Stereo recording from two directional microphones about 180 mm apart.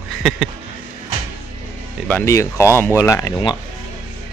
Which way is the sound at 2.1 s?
15° left (ahead or behind).